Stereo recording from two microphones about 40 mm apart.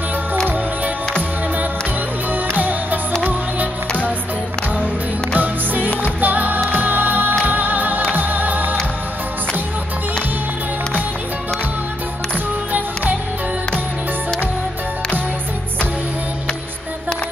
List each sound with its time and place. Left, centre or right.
2.5 s music: right
5.3 s music: right
12.7 s music: right